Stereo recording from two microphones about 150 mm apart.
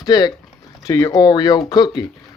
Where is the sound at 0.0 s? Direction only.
25° left (ahead or behind).